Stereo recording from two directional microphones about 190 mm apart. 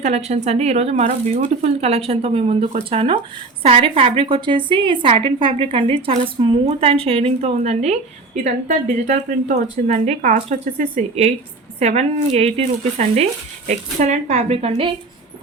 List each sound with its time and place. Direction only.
0.0 s a woman's voice: 35° right (ahead or behind)